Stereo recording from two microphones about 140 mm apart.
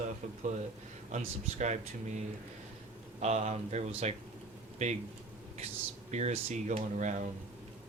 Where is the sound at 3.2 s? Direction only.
50° right (ahead or behind).